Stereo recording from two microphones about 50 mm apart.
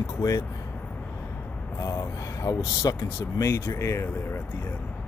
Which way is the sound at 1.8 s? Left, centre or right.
Left.